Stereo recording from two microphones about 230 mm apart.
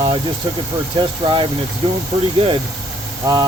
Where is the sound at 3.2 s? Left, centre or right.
Centre.